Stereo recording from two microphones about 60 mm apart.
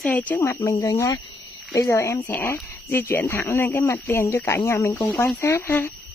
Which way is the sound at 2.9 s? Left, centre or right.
Left.